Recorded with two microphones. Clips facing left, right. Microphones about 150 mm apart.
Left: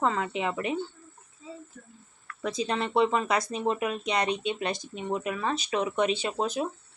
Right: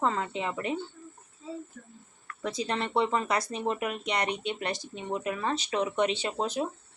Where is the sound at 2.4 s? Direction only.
20° left (ahead or behind).